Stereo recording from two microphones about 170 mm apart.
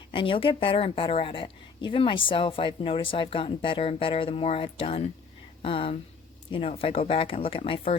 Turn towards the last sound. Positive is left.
turn(degrees=35)  # may be behind; listen again after turning